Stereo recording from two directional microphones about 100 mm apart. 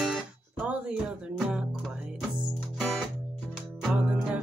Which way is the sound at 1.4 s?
10° right (ahead or behind).